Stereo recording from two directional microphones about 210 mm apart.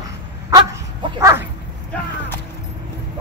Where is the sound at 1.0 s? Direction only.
20° right (ahead or behind).